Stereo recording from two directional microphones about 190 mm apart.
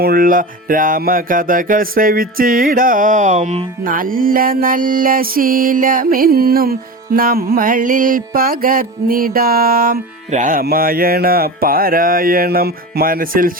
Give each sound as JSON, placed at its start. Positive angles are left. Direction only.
{"t": 0.0, "sound": "music", "side_deg": -50}
{"t": 3.9, "sound": "music", "side_deg": -45}